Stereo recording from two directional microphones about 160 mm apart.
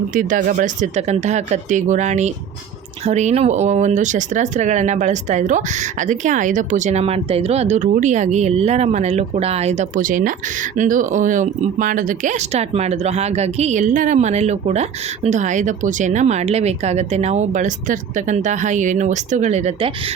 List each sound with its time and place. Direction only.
0.1 s speech: 55° right (ahead or behind)